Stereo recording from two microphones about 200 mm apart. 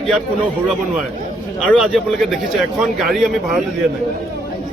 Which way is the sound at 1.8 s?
Centre (ahead or behind).